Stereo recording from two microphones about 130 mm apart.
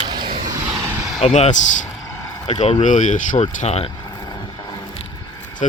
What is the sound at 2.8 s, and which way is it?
Speech, 75° left (ahead or behind).